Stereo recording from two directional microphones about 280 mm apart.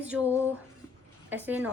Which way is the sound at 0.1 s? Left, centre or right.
Centre.